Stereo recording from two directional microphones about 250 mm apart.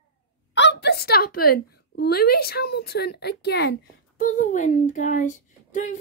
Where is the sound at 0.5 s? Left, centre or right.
Left.